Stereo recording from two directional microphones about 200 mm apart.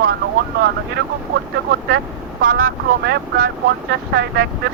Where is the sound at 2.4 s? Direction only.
45° right (ahead or behind).